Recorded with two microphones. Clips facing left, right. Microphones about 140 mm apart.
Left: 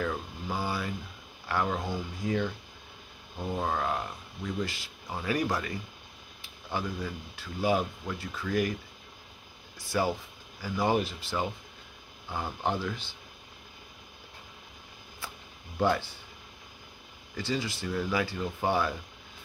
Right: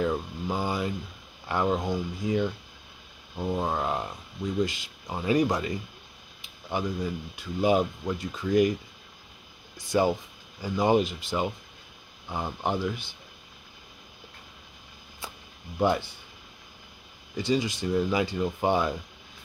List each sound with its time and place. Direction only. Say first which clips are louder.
0.0 s speech: right 5 dB; 20° right (ahead or behind)
9.8 s speech: right 5 dB; 20° right (ahead or behind)
15.8 s speech: right 2 dB; 15° right (ahead or behind)
17.4 s speech: right 6 dB; 15° right (ahead or behind)